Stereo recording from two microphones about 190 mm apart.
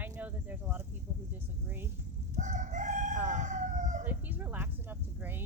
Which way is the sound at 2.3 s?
40° right (ahead or behind).